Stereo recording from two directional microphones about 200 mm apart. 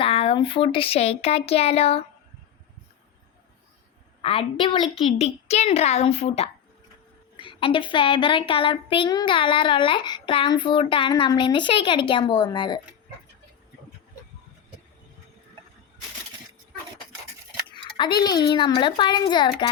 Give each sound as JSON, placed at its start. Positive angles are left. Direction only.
{"t": 0.0, "sound": "speech", "side_deg": 30}
{"t": 4.2, "sound": "a woman's voice", "side_deg": 25}
{"t": 17.7, "sound": "speech", "side_deg": 25}